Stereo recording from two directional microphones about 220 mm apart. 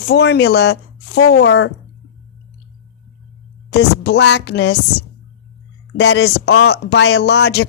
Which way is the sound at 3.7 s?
50° left (ahead or behind).